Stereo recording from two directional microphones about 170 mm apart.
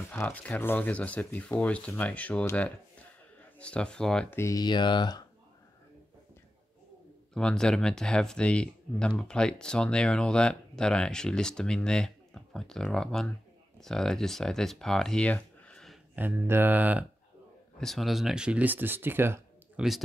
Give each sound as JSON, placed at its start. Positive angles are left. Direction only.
{"t": 0.1, "sound": "speech", "side_deg": 10}
{"t": 7.3, "sound": "speech", "side_deg": 5}
{"t": 16.2, "sound": "speech", "side_deg": -10}
{"t": 17.7, "sound": "speech", "side_deg": 0}